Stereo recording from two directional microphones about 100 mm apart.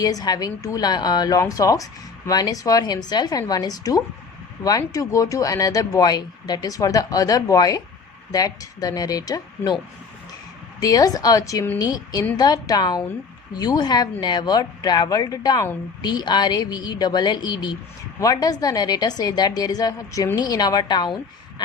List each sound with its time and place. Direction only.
0.0 s a woman's voice: 40° left (ahead or behind)
10.8 s a woman's voice: 40° left (ahead or behind)